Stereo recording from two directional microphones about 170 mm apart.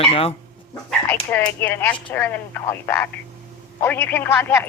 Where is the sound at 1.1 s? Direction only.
10° left (ahead or behind).